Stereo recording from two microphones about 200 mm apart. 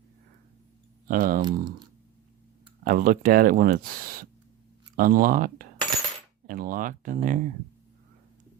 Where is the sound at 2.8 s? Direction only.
45° right (ahead or behind).